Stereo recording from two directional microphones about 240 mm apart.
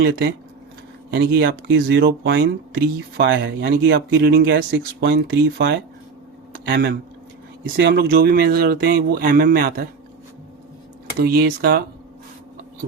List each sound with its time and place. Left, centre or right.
0.0 s speech: right
11.2 s speech: right